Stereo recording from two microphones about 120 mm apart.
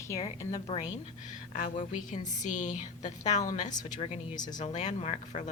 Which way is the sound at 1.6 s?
90° left.